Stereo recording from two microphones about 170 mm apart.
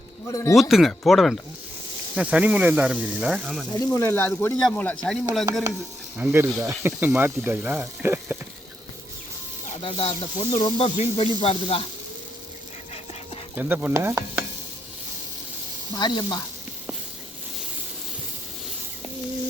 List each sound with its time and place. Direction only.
0.3 s speech: 20° left (ahead or behind)
0.5 s speech: centre (ahead or behind)
3.8 s speech: 15° left (ahead or behind); by 5.5 s centre (ahead or behind)
6.1 s speech: 15° right (ahead or behind)
9.8 s snake: 35° left (ahead or behind)
13.6 s speech: 10° right (ahead or behind)
16.0 s speech: 25° left (ahead or behind)